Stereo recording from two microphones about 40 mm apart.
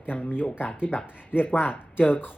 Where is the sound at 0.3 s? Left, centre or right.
Left.